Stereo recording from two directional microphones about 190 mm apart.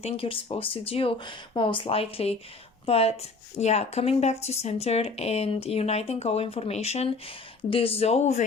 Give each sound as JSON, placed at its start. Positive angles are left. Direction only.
{"t": 0.0, "sound": "speech", "side_deg": 30}